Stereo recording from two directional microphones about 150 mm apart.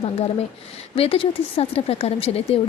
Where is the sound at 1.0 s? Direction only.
35° left (ahead or behind).